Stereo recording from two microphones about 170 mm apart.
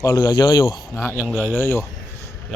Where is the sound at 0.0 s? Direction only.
20° left (ahead or behind).